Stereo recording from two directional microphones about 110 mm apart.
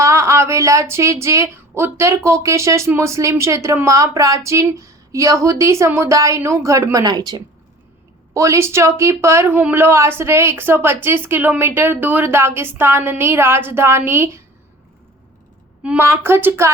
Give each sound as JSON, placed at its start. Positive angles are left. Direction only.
{"t": 0.0, "sound": "a woman's voice", "side_deg": -25}
{"t": 8.3, "sound": "a woman's voice", "side_deg": -25}
{"t": 15.8, "sound": "a woman's voice", "side_deg": -10}